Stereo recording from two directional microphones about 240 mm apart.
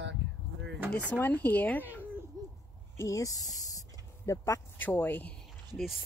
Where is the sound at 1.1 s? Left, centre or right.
Centre.